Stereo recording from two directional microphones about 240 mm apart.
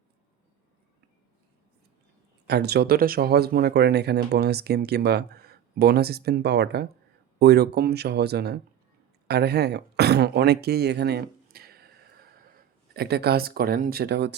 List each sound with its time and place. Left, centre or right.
2.5 s speech: right
13.0 s speech: right